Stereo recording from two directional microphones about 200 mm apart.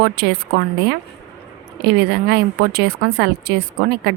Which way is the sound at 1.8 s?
55° right (ahead or behind).